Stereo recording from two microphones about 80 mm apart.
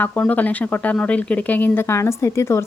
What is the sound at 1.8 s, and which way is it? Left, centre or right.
Speech, left.